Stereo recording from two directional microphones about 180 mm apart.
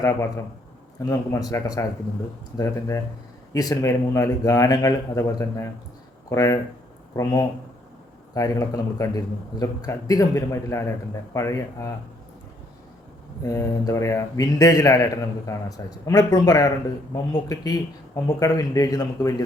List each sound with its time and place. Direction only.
0.0 s a man's voice: 15° left (ahead or behind)
13.4 s a man's voice: 20° left (ahead or behind)